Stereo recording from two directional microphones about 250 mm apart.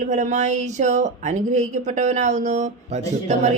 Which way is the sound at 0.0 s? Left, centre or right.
Right.